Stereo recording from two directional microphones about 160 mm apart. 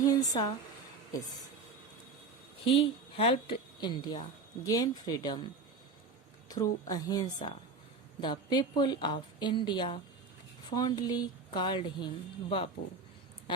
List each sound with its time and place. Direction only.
0.1 s speech: 25° left (ahead or behind)
2.6 s a woman's voice: 35° left (ahead or behind)
6.5 s a woman's voice: 25° left (ahead or behind)